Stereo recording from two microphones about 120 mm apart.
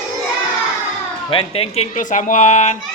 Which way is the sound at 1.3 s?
50° left (ahead or behind).